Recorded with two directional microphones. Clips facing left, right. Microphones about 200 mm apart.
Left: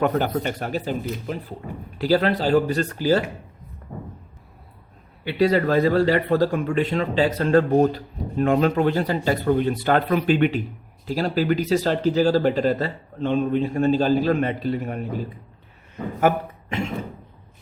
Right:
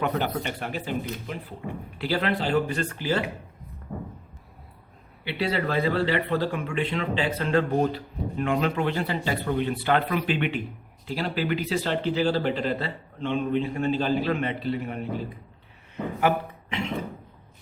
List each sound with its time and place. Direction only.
0.0 s a man's voice: 45° left (ahead or behind)
2.0 s a man's voice: 40° left (ahead or behind)
5.2 s a man's voice: 45° left (ahead or behind)
16.2 s a man's voice: 45° left (ahead or behind)